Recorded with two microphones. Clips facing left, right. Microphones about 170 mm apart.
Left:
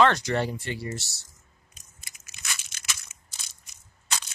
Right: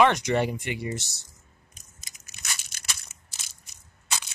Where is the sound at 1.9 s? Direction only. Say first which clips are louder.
Even; 40° right (ahead or behind).